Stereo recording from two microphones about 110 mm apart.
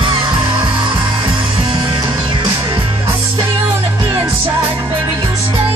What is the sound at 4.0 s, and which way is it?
Music, 30° right (ahead or behind).